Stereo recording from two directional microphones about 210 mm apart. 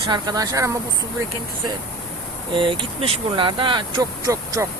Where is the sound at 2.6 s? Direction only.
25° right (ahead or behind).